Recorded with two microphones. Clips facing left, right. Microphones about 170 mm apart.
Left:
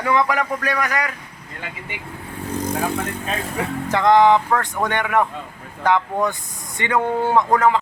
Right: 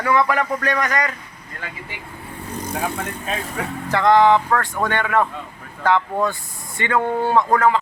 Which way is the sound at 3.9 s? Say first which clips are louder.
Even; 20° left (ahead or behind).